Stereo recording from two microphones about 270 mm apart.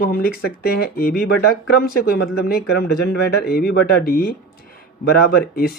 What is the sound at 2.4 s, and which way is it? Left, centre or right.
Speech, left.